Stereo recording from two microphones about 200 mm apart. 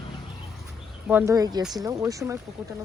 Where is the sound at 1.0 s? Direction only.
10° right (ahead or behind).